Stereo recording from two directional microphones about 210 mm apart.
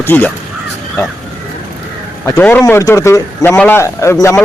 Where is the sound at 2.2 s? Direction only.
5° left (ahead or behind).